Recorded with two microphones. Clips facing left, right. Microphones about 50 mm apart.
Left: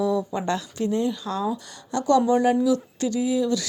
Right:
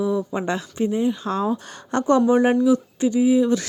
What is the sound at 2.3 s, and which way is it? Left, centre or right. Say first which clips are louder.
Speech: right 3 dB; right.